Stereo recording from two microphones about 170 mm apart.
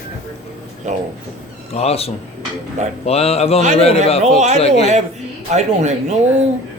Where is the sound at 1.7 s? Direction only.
35° left (ahead or behind).